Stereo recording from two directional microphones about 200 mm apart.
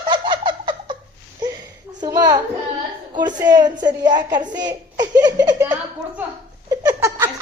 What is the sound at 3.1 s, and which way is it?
A woman's voice, 20° right (ahead or behind).